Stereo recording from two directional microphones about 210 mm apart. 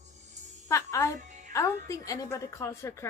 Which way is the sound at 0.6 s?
15° left (ahead or behind).